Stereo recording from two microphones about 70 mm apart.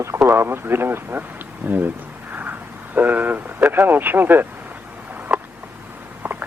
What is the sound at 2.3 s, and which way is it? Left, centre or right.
Vehicle, right.